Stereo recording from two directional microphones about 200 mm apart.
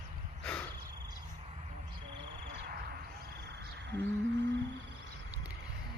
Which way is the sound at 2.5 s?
50° right (ahead or behind).